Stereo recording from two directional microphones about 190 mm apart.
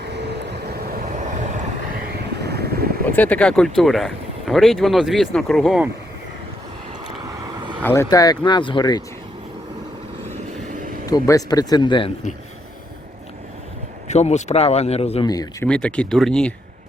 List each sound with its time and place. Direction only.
0.1 s vehicle: 60° right (ahead or behind); by 1.6 s 40° right (ahead or behind)
2.0 s vehicle: 60° right (ahead or behind)
3.1 s speech: 10° left (ahead or behind)
7.8 s speech: 10° left (ahead or behind)
11.0 s speech: 20° left (ahead or behind)
14.1 s speech: 35° left (ahead or behind)
15.6 s speech: 5° left (ahead or behind)